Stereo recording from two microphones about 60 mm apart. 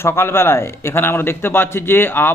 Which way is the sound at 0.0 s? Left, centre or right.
Left.